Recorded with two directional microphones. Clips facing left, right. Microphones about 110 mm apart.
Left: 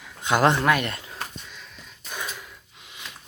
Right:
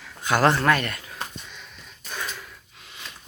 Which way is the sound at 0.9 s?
25° left (ahead or behind).